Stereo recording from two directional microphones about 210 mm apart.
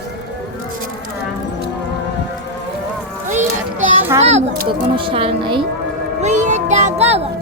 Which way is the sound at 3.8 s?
10° right (ahead or behind).